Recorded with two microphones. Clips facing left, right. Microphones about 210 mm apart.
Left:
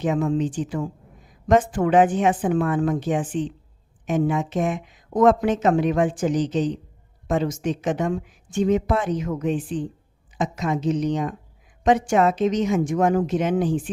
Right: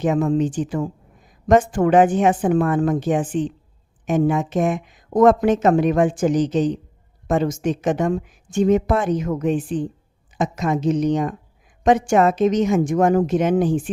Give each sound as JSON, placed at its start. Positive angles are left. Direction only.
{"t": 0.0, "sound": "speech", "side_deg": -45}